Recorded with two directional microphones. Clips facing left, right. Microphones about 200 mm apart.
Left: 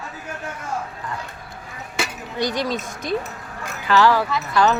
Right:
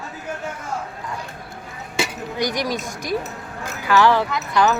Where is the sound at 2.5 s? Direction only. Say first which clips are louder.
Even; 15° right (ahead or behind).